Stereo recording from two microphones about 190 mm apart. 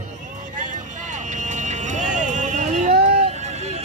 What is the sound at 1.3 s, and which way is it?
Vehicle, 40° right (ahead or behind).